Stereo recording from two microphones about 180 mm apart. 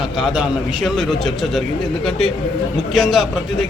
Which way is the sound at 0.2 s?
5° right (ahead or behind).